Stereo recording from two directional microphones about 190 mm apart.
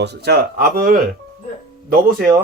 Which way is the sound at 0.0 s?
60° right (ahead or behind).